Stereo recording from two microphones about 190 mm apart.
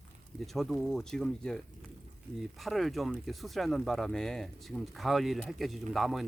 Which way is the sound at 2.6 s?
Centre (ahead or behind).